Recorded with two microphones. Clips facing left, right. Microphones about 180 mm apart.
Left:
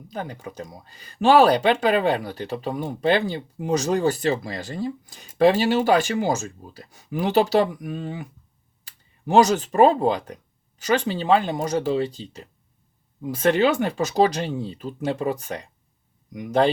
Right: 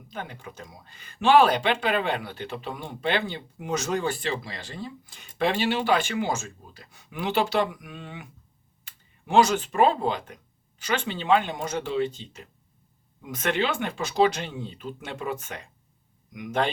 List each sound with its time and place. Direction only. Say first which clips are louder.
0.1 s speech: left 5 dB; 40° left (ahead or behind)